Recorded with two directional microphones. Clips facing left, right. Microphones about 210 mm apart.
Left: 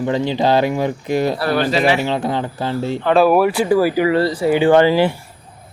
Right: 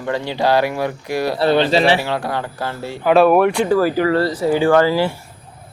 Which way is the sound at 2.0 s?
20° left (ahead or behind).